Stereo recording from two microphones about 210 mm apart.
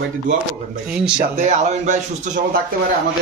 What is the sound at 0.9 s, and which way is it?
Speech, 5° right (ahead or behind).